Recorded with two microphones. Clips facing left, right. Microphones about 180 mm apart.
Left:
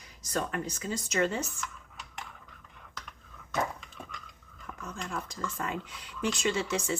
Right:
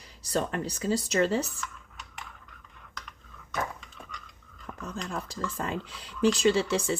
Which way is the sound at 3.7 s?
Centre (ahead or behind).